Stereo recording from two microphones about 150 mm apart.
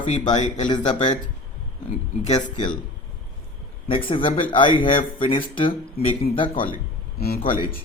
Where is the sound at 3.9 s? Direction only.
35° left (ahead or behind).